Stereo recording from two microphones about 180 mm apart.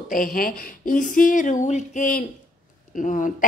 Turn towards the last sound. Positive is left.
turn(degrees=45)  # may be behind; listen again after turning